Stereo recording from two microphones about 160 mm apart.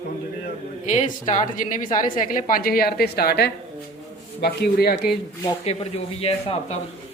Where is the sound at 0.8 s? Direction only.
50° left (ahead or behind); by 5.1 s 75° left (ahead or behind).